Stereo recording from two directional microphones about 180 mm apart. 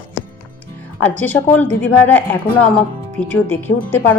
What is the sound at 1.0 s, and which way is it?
Speech, 10° left (ahead or behind).